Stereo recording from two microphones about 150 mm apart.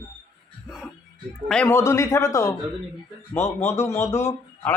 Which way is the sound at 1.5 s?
5° left (ahead or behind).